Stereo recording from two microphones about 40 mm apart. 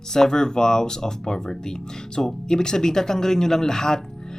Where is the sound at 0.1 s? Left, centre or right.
Centre.